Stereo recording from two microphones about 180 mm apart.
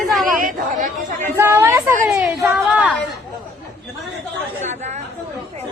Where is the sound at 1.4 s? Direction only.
15° right (ahead or behind).